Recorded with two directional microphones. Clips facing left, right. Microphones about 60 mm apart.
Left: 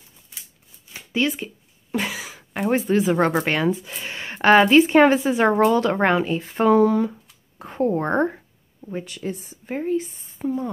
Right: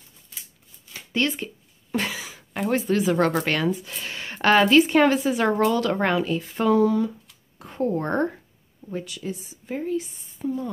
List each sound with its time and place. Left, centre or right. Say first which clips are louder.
0.3 s a sound: even; centre
2.7 s speech: left 2 dB; left
9.0 s speech: left 3 dB; left